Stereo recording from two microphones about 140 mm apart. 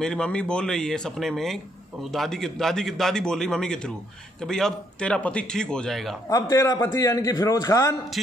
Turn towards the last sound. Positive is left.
turn(degrees=25)  # may be behind; listen again after turning